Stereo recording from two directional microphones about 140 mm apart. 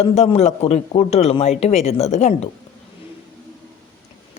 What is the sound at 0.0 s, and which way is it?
Speech, 50° left (ahead or behind).